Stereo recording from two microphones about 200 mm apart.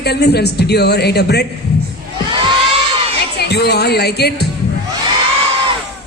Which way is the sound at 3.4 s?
55° left (ahead or behind).